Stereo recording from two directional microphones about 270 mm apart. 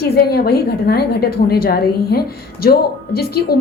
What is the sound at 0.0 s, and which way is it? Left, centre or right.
A woman's voice, left.